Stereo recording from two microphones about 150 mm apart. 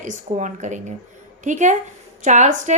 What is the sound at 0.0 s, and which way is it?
A woman's voice, 55° right (ahead or behind).